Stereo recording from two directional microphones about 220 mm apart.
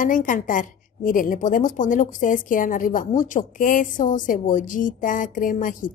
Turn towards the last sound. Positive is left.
turn(degrees=35)  # may be behind; listen again after turning